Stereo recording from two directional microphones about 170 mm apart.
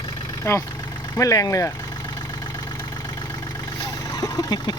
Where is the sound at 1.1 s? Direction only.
20° left (ahead or behind).